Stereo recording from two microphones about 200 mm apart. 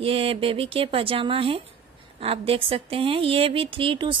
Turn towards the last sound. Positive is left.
turn(degrees=-25)  # may be behind; listen again after turning